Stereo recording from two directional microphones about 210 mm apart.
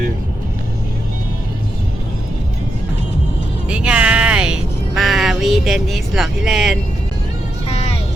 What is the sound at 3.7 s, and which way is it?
Music, 5° right (ahead or behind).